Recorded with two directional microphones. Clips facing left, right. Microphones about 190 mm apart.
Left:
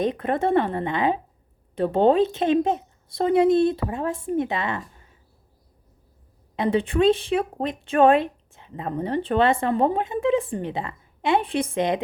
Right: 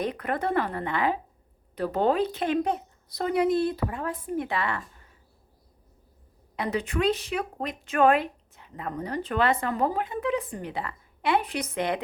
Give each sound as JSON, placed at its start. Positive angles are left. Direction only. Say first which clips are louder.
{"t": 0.0, "sound": "speech", "louder": "left 6 dB", "side_deg": 25}
{"t": 6.6, "sound": "speech", "louder": "left 6 dB", "side_deg": 30}